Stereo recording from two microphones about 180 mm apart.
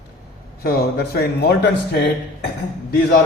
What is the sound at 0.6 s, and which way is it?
Speech, 60° left (ahead or behind).